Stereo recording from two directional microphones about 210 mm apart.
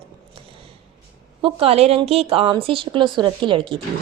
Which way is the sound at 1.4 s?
25° right (ahead or behind).